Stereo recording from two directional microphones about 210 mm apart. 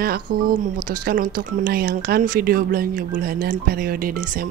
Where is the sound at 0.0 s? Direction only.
45° right (ahead or behind).